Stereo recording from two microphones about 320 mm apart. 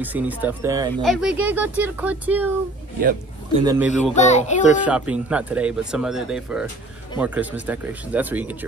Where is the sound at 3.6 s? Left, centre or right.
Centre.